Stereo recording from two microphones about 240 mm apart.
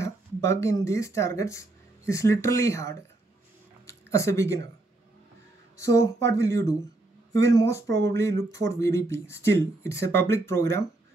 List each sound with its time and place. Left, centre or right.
0.0 s speech: centre
3.8 s a sound: centre
5.8 s speech: centre
7.9 s speech: right
8.2 s speech: centre